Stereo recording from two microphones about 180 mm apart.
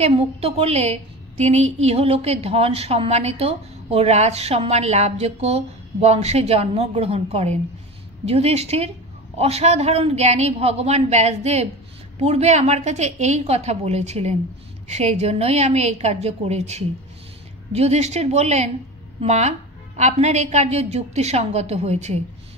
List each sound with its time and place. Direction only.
0.0 s a woman's voice: 35° right (ahead or behind)